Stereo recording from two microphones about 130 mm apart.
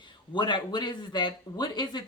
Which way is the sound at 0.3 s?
35° left (ahead or behind).